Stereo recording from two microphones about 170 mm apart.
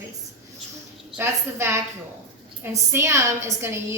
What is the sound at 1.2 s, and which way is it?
Speech, 15° right (ahead or behind).